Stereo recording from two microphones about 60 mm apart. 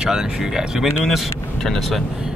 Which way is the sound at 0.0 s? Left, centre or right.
Centre.